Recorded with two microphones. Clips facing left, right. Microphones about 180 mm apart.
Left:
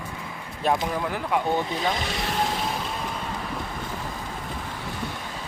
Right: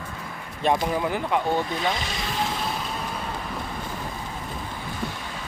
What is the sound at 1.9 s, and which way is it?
Speech, 60° left (ahead or behind).